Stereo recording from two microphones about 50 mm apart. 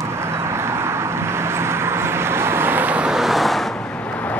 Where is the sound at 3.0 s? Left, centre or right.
Centre.